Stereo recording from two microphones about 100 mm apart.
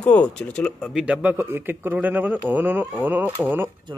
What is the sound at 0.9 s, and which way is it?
Speech, 10° right (ahead or behind).